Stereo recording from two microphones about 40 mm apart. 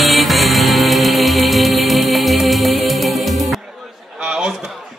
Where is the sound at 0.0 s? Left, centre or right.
Centre.